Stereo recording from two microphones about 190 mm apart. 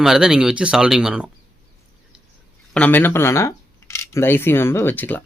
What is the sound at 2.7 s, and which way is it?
Camera, 10° left (ahead or behind).